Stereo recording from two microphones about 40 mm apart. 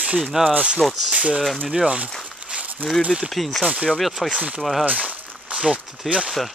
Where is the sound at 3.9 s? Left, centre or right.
Centre.